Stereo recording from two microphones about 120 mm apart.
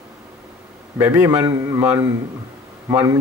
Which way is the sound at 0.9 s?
15° right (ahead or behind).